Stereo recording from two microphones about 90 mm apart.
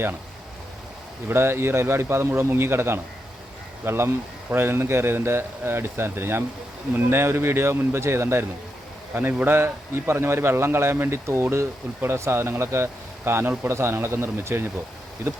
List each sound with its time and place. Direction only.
1.3 s a man's voice: 25° right (ahead or behind)